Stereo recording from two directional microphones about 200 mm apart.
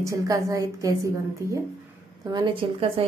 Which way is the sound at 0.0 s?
15° right (ahead or behind).